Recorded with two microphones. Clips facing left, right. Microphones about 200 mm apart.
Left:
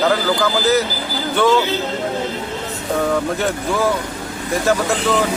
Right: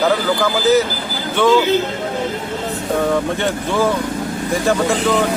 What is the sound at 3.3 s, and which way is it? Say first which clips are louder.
Speech: right 1 dB; centre (ahead or behind).